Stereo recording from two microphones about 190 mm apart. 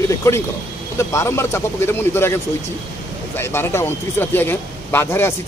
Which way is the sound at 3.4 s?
10° left (ahead or behind).